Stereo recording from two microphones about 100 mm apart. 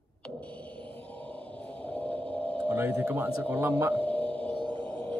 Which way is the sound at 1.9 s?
15° left (ahead or behind).